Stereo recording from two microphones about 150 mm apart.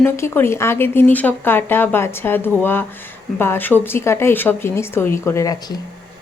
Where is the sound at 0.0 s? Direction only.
15° left (ahead or behind).